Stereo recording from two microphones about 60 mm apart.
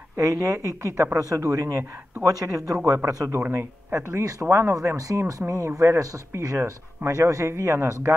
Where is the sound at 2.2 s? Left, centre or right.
Right.